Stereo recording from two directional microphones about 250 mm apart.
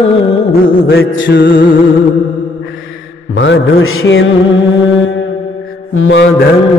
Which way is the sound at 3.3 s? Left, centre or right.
Left.